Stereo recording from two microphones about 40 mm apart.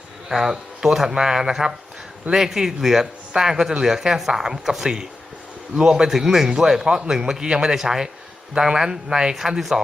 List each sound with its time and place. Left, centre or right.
0.3 s a man's voice: centre
9.6 s a man's voice: centre